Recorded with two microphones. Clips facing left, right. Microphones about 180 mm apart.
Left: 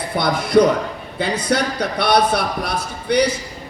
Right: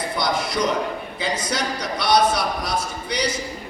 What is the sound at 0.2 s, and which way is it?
Speech, 55° left (ahead or behind).